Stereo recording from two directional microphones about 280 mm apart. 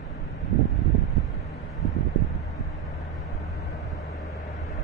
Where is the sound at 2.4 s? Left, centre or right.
Centre.